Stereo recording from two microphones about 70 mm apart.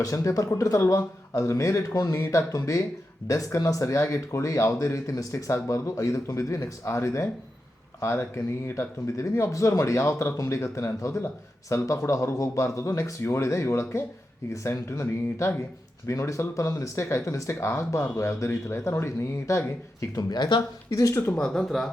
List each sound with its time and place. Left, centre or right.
0.0 s speech: left
20.3 s speech: left
20.9 s speech: left
21.3 s speech: centre